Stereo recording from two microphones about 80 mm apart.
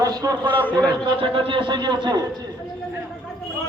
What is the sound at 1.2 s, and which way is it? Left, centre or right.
Speech, right.